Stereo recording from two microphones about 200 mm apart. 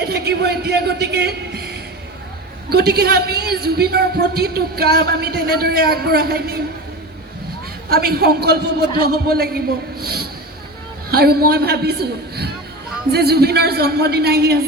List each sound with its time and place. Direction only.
0.1 s a man's voice: 55° right (ahead or behind)
7.9 s a man's voice: 50° right (ahead or behind)